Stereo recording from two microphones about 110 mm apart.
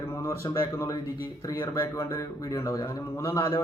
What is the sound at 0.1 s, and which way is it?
A man's voice, 25° left (ahead or behind).